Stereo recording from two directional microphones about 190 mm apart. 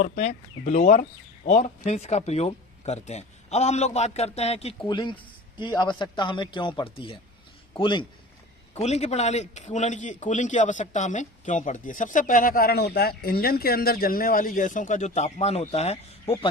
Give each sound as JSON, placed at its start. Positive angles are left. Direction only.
{"t": 0.0, "sound": "a man's voice", "side_deg": 35}
{"t": 8.7, "sound": "a man's voice", "side_deg": 35}